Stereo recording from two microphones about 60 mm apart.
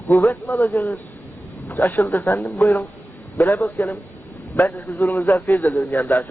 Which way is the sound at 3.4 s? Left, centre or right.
Left.